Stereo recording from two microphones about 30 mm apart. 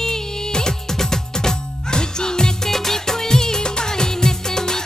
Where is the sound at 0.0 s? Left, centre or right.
Left.